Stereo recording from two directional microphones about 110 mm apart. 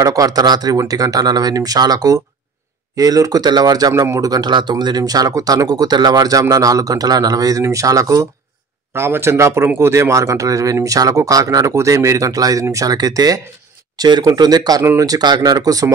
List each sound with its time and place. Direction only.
0.0 s speech: 35° right (ahead or behind)